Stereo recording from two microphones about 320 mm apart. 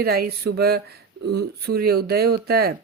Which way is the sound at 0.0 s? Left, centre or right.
Right.